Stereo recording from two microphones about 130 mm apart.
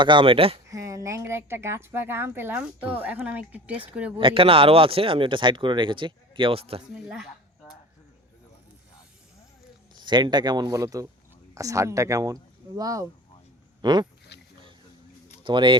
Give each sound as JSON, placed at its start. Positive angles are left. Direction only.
{"t": 0.0, "sound": "speech", "side_deg": -40}
{"t": 0.7, "sound": "a woman's voice", "side_deg": -25}
{"t": 4.2, "sound": "speech", "side_deg": -40}
{"t": 6.9, "sound": "speech", "side_deg": -5}
{"t": 10.0, "sound": "a woman's voice", "side_deg": -35}
{"t": 15.4, "sound": "speech", "side_deg": -40}